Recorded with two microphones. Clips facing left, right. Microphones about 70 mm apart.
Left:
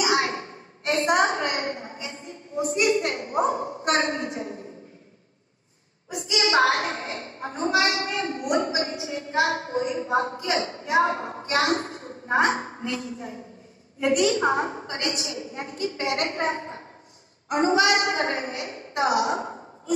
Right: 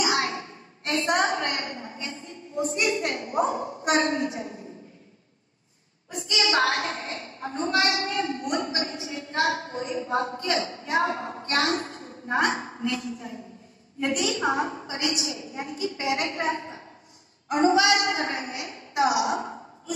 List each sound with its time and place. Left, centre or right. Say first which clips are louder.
0.0 s a woman's voice: left 2 dB; left
6.3 s a woman's voice: left 3 dB; left